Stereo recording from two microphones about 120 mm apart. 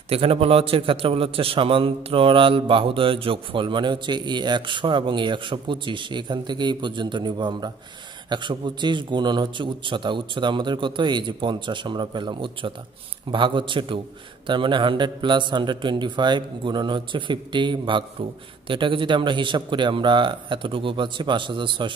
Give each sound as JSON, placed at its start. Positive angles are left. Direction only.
{"t": 0.1, "sound": "a man's voice", "side_deg": -55}